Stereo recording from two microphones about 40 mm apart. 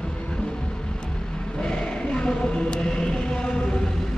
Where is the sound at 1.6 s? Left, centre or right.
Centre.